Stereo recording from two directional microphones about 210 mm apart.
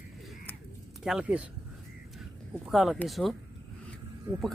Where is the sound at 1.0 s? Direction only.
5° right (ahead or behind).